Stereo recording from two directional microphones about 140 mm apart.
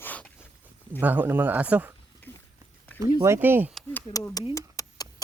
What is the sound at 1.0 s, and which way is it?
Speech, 15° right (ahead or behind).